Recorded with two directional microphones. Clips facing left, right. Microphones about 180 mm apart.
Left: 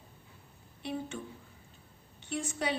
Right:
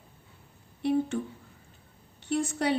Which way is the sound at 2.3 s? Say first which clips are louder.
Right 7 dB; 65° right (ahead or behind).